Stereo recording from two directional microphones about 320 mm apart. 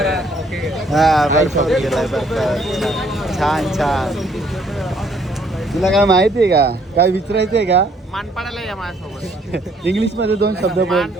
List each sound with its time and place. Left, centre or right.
0.0 s speech: centre
6.2 s speech: right
10.0 s speech: right
10.8 s speech: centre